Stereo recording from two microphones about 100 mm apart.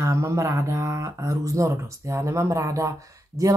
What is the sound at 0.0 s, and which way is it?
Speech, 30° right (ahead or behind).